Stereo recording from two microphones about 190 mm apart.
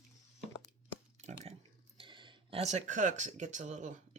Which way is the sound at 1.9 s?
25° right (ahead or behind).